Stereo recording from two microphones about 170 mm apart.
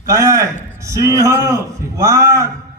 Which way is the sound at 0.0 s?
20° right (ahead or behind).